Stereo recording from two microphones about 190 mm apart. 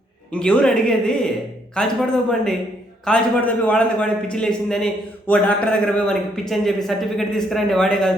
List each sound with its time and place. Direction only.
0.3 s a man's voice: 5° left (ahead or behind)